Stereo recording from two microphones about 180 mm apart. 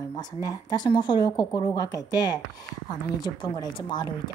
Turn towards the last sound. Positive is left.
turn(degrees=25)  # may be behind; listen again after turning